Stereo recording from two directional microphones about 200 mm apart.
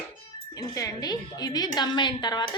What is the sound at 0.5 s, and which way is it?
A woman's voice, 15° left (ahead or behind).